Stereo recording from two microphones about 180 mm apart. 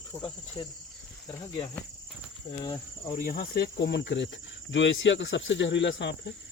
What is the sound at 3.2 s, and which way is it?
Speech, 55° left (ahead or behind).